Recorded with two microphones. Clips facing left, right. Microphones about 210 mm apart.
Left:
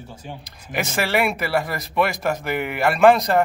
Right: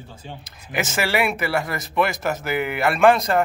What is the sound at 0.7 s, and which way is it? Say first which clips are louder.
Speech: left 1 dB; centre (ahead or behind).